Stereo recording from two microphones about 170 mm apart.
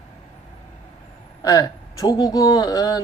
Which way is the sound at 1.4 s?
20° left (ahead or behind).